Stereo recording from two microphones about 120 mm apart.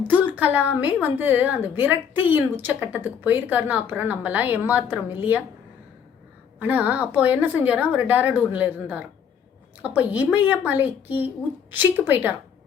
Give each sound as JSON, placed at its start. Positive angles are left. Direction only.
{"t": 0.1, "sound": "a woman's voice", "side_deg": -15}
{"t": 6.6, "sound": "a woman's voice", "side_deg": -15}